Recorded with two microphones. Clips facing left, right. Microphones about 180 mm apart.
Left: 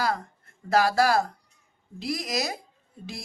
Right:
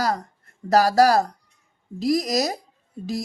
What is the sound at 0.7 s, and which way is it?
Speech, 40° right (ahead or behind).